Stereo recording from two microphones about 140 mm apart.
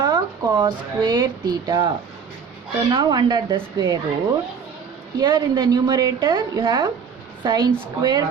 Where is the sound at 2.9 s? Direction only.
30° right (ahead or behind).